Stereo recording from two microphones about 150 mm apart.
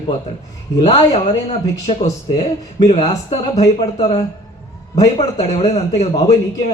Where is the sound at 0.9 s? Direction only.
45° left (ahead or behind).